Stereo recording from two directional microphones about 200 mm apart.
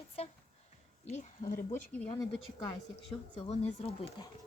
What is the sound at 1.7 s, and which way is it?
Speech, 5° left (ahead or behind).